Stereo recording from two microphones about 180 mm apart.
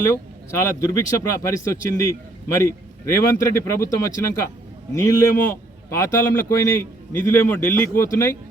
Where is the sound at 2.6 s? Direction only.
15° left (ahead or behind).